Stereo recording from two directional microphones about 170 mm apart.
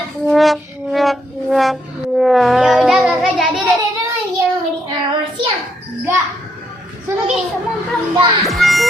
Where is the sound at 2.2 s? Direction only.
Centre (ahead or behind).